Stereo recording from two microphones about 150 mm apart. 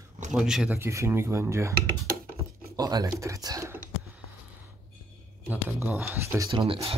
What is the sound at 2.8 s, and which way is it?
Speech, 25° right (ahead or behind).